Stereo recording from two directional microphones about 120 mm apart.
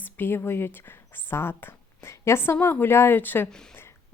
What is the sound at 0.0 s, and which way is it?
A woman's voice, 15° left (ahead or behind).